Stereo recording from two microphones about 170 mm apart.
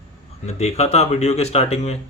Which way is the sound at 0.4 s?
40° left (ahead or behind).